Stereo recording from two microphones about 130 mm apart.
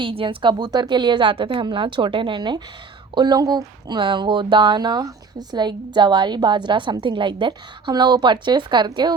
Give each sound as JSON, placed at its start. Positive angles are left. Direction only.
{"t": 0.0, "sound": "speech", "side_deg": -45}